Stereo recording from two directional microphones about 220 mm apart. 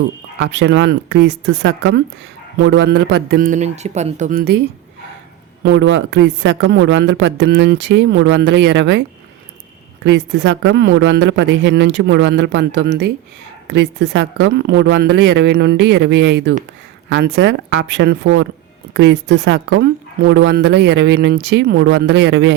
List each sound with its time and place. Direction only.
0.3 s speech: 50° right (ahead or behind)
5.6 s a woman's voice: 55° right (ahead or behind)